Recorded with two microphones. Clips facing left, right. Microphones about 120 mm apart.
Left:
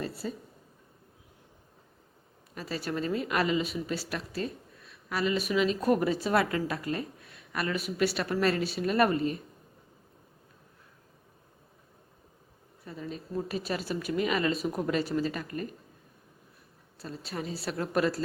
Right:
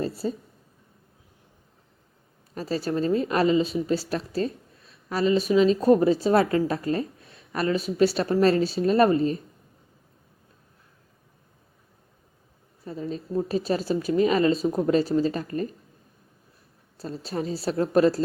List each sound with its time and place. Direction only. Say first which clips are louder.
0.0 s a sound: right 7 dB; 35° right (ahead or behind)
2.6 s speech: right 7 dB; 35° right (ahead or behind)
12.8 s speech: right 7 dB; 35° right (ahead or behind)
17.0 s speech: right 7 dB; 35° right (ahead or behind)